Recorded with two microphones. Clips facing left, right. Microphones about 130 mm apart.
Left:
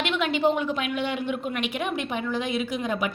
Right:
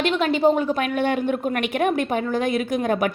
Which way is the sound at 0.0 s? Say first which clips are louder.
Right 5 dB; 40° right (ahead or behind).